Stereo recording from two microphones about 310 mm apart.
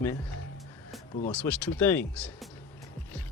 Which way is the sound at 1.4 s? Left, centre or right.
Centre.